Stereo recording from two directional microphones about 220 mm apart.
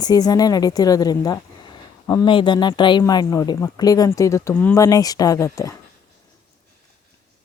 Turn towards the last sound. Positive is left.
turn(degrees=15)  # may be behind; listen again after turning